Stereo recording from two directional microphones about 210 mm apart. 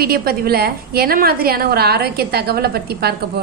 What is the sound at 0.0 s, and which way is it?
A woman's voice, 45° right (ahead or behind).